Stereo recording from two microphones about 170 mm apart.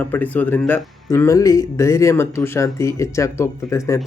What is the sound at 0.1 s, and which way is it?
Speech, 10° left (ahead or behind).